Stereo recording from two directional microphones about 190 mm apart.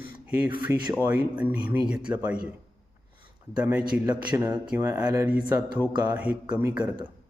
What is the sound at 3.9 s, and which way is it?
A man's voice, 10° right (ahead or behind).